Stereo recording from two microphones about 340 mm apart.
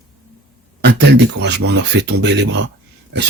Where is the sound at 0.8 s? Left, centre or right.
Right.